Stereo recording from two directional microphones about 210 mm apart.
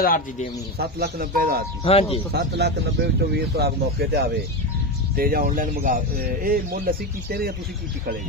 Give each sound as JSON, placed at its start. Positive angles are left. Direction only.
{"t": 0.0, "sound": "a man's voice", "side_deg": 40}
{"t": 0.7, "sound": "speech", "side_deg": -50}
{"t": 1.9, "sound": "speech", "side_deg": 30}
{"t": 2.3, "sound": "speech", "side_deg": -50}